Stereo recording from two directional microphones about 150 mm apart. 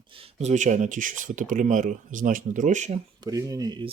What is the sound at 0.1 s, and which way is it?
Speech, 40° right (ahead or behind).